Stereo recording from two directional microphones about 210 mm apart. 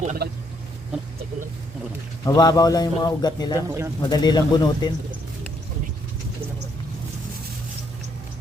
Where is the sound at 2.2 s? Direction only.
20° left (ahead or behind).